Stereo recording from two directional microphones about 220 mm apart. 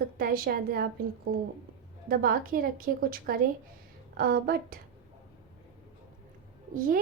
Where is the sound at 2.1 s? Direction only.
40° right (ahead or behind).